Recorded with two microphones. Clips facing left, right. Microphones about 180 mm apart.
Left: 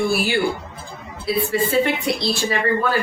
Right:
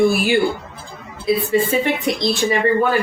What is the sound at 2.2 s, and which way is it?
Speech, 20° right (ahead or behind).